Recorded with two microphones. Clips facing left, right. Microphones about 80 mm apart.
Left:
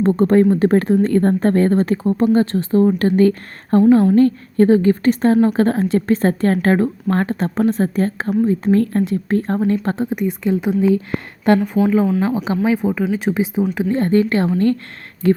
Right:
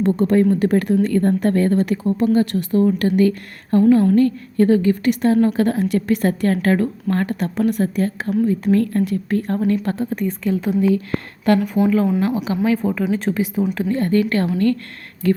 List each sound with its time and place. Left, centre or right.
0.0 s a woman's voice: left
12.6 s speech: centre
13.3 s a woman's voice: left